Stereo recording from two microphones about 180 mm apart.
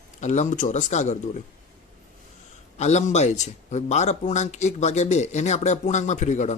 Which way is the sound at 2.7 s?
40° left (ahead or behind).